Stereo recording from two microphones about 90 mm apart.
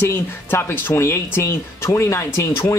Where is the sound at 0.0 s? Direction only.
25° left (ahead or behind).